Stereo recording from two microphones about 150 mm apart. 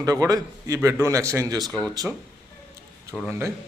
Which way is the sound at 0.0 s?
25° right (ahead or behind).